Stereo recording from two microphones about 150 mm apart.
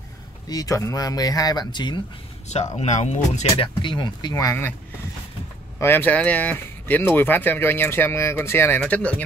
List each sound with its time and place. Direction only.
0.5 s speech: 25° left (ahead or behind)
2.7 s speech: 50° left (ahead or behind)
3.5 s speech: 35° left (ahead or behind); by 4.7 s 15° left (ahead or behind)
5.8 s speech: 15° left (ahead or behind)